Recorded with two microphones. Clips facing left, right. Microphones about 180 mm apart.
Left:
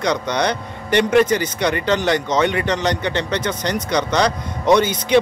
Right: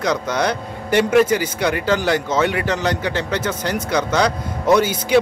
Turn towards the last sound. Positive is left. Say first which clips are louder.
# even
turn(degrees=-5)  # may be behind; listen again after turning